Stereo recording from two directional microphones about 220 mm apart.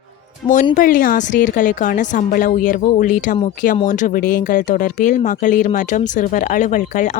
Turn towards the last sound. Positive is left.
turn(degrees=35)  # may be behind; listen again after turning